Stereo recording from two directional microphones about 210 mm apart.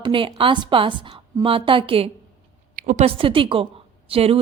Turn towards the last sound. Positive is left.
turn(degrees=-30)  # may be behind; listen again after turning